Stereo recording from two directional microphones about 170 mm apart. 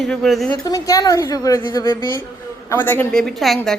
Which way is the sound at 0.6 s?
20° left (ahead or behind).